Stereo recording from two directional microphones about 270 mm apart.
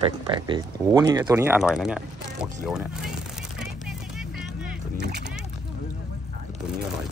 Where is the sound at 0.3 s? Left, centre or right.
Centre.